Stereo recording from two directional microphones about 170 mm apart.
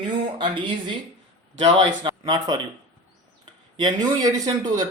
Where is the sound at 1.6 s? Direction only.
30° right (ahead or behind).